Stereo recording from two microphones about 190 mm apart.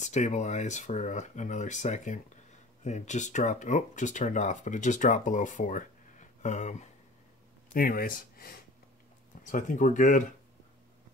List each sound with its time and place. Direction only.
0.0 s speech: 40° left (ahead or behind)
7.7 s speech: 50° left (ahead or behind)